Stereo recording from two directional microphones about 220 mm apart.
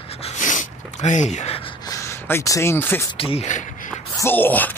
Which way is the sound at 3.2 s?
25° left (ahead or behind).